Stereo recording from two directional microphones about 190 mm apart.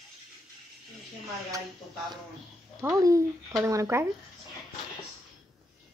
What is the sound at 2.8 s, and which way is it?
Speech, 10° right (ahead or behind).